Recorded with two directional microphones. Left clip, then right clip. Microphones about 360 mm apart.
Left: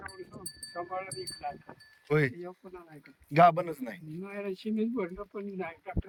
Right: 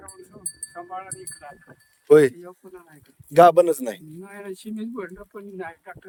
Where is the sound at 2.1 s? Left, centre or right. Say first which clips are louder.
Right 14 dB; centre.